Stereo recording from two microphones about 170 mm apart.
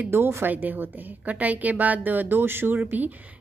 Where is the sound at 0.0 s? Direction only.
15° right (ahead or behind).